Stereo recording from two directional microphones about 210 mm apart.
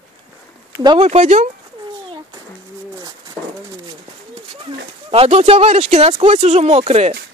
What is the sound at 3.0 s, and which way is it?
Bird, 20° right (ahead or behind).